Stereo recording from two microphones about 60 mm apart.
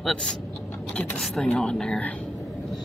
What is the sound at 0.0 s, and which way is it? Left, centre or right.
Speech, centre.